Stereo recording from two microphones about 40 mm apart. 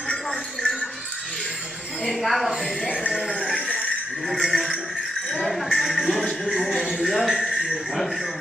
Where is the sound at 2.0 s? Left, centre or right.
Centre.